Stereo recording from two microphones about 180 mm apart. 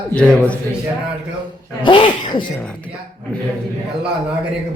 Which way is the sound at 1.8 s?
25° left (ahead or behind).